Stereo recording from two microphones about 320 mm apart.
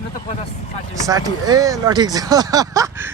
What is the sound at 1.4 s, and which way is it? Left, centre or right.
Speech, centre.